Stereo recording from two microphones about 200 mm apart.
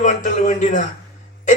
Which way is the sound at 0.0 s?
40° left (ahead or behind).